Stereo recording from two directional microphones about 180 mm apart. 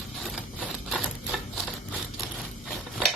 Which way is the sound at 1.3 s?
5° right (ahead or behind).